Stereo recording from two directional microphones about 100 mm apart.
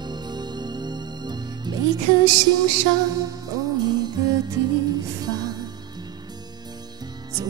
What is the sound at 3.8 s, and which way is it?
Music, 45° right (ahead or behind).